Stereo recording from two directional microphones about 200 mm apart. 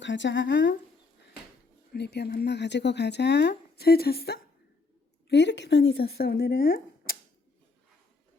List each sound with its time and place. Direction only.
0.0 s speech: 65° left (ahead or behind)
1.9 s a woman's voice: 55° left (ahead or behind)